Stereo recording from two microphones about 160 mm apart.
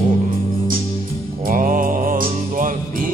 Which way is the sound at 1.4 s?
55° right (ahead or behind).